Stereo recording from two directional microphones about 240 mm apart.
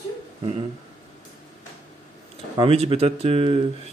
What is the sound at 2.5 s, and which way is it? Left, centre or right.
Speech, right.